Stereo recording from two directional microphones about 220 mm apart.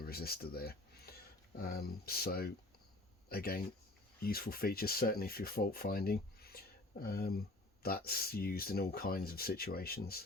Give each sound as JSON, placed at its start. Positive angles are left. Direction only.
{"t": 0.0, "sound": "speech", "side_deg": 45}
{"t": 4.2, "sound": "rub", "side_deg": 40}